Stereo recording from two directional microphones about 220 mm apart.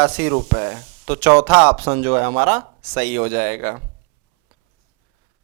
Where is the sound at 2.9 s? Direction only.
10° right (ahead or behind).